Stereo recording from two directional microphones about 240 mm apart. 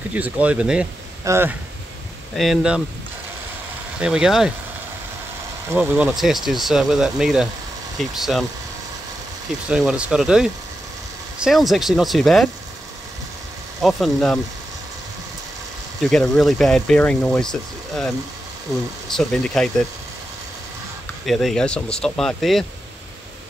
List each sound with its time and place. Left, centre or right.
0.1 s speech: centre
4.0 s speech: centre
5.7 s speech: centre
9.7 s speech: centre
13.7 s speech: centre
16.0 s speech: centre
21.3 s speech: centre